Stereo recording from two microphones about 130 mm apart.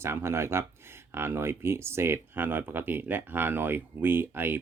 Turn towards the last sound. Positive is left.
turn(degrees=-15)  # may be behind; listen again after turning